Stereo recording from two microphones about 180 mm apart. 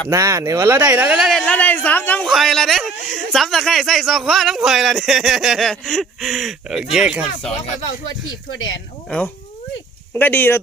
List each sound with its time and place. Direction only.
0.1 s speech: 15° right (ahead or behind)
8.5 s speech: 90° left
9.0 s speech: 5° left (ahead or behind)